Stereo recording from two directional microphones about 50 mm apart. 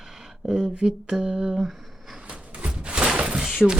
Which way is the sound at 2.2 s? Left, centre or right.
Right.